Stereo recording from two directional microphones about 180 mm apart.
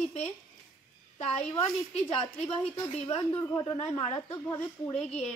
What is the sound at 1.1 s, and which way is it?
A woman's voice, 35° left (ahead or behind).